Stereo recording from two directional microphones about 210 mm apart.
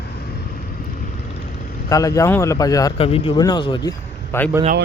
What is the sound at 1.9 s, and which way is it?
Speech, 15° left (ahead or behind).